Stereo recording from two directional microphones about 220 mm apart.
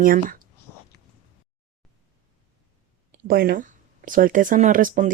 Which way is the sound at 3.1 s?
45° right (ahead or behind).